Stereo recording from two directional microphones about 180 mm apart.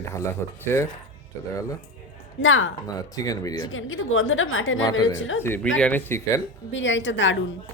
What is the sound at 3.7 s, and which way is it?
A woman's voice, 90° left.